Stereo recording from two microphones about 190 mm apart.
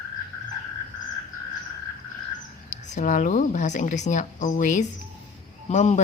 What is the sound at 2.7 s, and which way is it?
A woman's voice, 40° left (ahead or behind).